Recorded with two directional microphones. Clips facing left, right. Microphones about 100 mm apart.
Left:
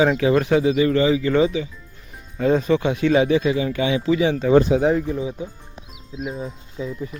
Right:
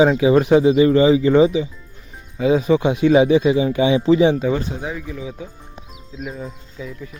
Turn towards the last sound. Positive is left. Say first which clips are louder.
# left 4 dB
turn(degrees=30)  # may be behind; listen again after turning